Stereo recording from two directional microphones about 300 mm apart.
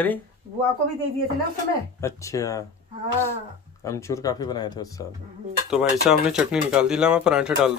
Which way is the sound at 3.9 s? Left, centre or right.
Centre.